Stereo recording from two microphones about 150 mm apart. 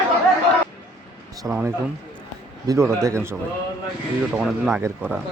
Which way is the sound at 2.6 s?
20° right (ahead or behind).